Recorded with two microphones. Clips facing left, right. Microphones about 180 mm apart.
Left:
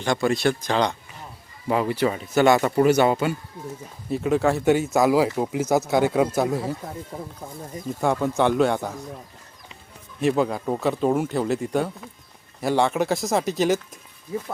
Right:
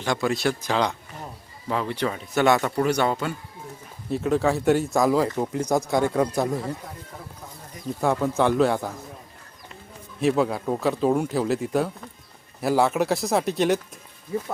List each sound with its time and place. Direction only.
0.0 s speech: centre (ahead or behind)
1.6 s speech: 10° left (ahead or behind)
7.1 s speech: 25° left (ahead or behind)
8.0 s speech: centre (ahead or behind)
10.2 s speech: centre (ahead or behind)